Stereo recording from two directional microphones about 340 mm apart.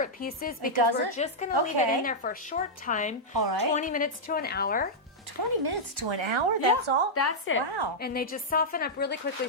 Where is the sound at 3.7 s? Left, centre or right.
Left.